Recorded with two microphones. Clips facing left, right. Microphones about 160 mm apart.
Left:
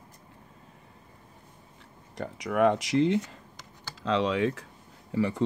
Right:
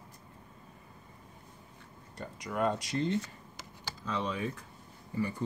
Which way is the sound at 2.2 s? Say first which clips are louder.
Left 8 dB; 70° left (ahead or behind).